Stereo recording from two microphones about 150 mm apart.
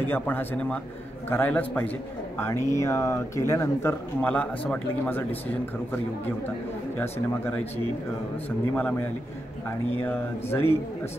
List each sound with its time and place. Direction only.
0.0 s speech: 15° left (ahead or behind)
7.0 s speech: 10° left (ahead or behind)
10.0 s speech: 15° left (ahead or behind)